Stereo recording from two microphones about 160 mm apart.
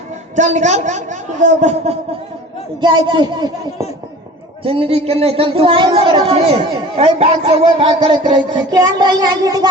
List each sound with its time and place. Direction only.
0.3 s a man's voice: 50° right (ahead or behind)
2.8 s speech: 30° right (ahead or behind)